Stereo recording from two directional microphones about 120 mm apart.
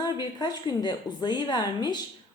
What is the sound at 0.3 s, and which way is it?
A woman's voice, 35° left (ahead or behind).